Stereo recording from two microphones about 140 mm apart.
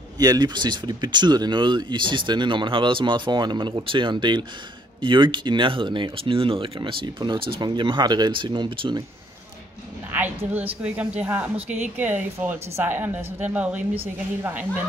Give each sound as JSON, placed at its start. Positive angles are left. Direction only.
{"t": 0.2, "sound": "speech", "side_deg": -30}
{"t": 10.1, "sound": "a woman's voice", "side_deg": -10}